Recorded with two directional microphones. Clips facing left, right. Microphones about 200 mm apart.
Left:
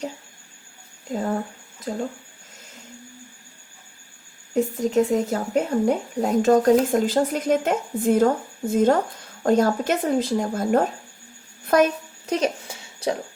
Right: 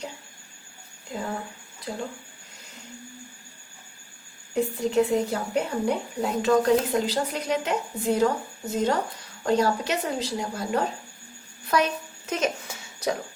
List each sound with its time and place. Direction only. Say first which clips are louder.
1.1 s speech: left 7 dB; 45° left (ahead or behind)
4.5 s speech: left 3 dB; 45° left (ahead or behind)
12.2 s a sound: left 4 dB; 35° left (ahead or behind)